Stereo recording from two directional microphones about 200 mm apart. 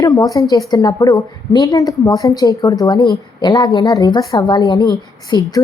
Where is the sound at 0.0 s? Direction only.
20° left (ahead or behind).